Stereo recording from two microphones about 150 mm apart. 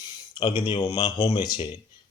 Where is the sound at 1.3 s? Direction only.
30° left (ahead or behind).